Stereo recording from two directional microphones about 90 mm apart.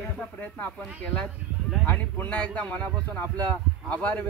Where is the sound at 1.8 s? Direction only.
20° left (ahead or behind).